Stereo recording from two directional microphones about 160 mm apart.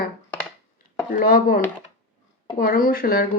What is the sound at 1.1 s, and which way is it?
A woman's voice, 55° left (ahead or behind).